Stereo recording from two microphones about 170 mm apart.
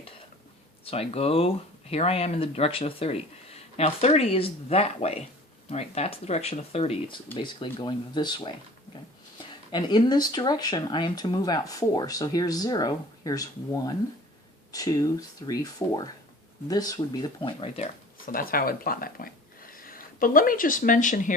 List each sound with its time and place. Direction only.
0.9 s speech: 35° left (ahead or behind)
18.3 s speech: 60° left (ahead or behind)